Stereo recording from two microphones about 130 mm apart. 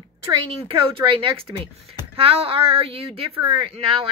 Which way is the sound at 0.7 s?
40° right (ahead or behind).